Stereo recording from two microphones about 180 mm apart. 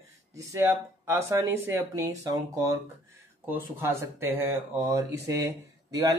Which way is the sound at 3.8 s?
15° right (ahead or behind).